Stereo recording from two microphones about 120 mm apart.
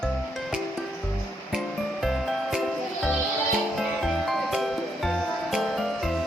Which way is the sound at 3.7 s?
Centre (ahead or behind).